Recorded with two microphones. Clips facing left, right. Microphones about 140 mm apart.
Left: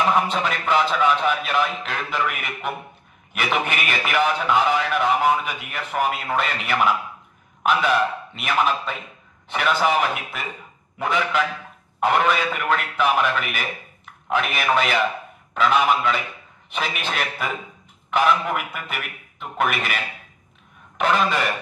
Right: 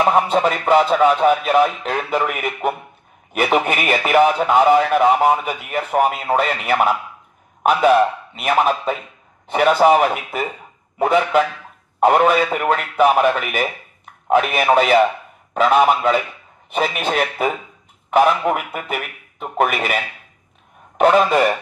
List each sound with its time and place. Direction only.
0.0 s a man's voice: 45° right (ahead or behind)
21.0 s a man's voice: 45° right (ahead or behind)